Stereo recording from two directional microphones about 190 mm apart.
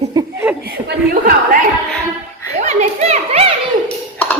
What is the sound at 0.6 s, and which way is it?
Chuckle, 55° right (ahead or behind).